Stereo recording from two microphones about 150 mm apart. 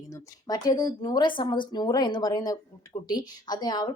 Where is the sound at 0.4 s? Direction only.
25° left (ahead or behind).